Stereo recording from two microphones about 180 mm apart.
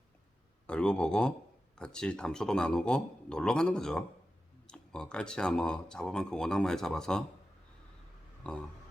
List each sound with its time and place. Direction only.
0.7 s speech: 5° left (ahead or behind)
8.4 s speech: 5° left (ahead or behind)